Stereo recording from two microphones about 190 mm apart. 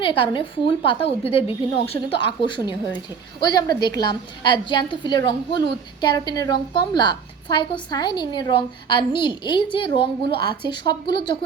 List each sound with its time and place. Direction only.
0.0 s a woman's voice: 25° left (ahead or behind)